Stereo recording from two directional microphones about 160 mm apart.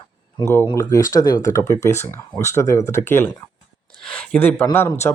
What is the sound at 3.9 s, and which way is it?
Speech, 5° left (ahead or behind).